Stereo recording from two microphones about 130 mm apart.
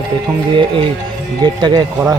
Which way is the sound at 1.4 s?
35° right (ahead or behind).